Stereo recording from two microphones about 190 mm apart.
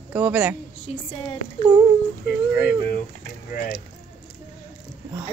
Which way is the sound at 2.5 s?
50° left (ahead or behind).